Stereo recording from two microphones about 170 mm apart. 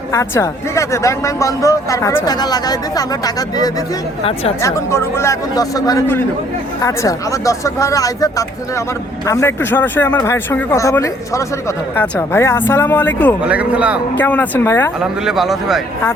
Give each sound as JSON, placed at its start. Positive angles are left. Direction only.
{"t": 0.1, "sound": "speech", "side_deg": 15}
{"t": 4.2, "sound": "speech", "side_deg": 35}
{"t": 4.6, "sound": "speech", "side_deg": 15}
{"t": 13.5, "sound": "a man's voice", "side_deg": -5}
{"t": 14.2, "sound": "speech", "side_deg": 10}
{"t": 15.2, "sound": "a man's voice", "side_deg": 0}